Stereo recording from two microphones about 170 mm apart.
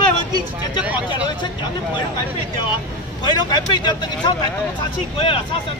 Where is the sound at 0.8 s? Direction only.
10° right (ahead or behind).